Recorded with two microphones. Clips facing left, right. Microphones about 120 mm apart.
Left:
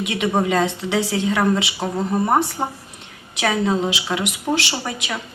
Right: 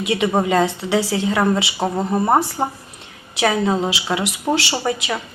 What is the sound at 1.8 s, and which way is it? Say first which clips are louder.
Speech: right 4 dB; 30° right (ahead or behind).